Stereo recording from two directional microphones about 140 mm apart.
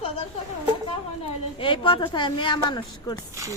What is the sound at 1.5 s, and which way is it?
A woman's voice, 35° left (ahead or behind).